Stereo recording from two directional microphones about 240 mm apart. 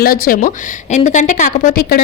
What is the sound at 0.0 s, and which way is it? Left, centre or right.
A woman's voice, left.